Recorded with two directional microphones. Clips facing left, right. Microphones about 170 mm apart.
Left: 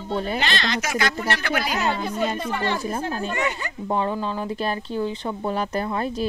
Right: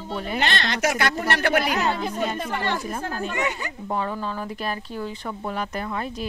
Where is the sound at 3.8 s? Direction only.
20° left (ahead or behind).